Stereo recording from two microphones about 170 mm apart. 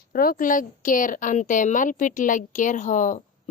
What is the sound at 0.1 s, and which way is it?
A woman's voice, 60° left (ahead or behind).